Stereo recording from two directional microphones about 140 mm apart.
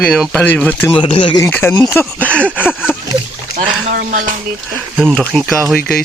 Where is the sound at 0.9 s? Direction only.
35° left (ahead or behind).